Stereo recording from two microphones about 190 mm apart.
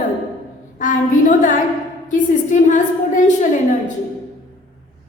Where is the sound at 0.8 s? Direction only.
40° left (ahead or behind).